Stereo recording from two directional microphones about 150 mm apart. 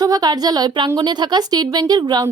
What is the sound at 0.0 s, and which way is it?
Speech, 25° right (ahead or behind).